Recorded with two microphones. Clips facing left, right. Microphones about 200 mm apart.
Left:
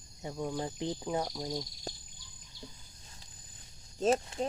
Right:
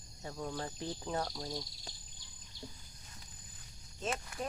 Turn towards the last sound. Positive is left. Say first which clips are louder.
# left 11 dB
turn(degrees=40)  # may be behind; listen again after turning